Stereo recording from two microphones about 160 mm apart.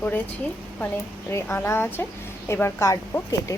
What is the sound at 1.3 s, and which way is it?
A woman's voice, 15° left (ahead or behind).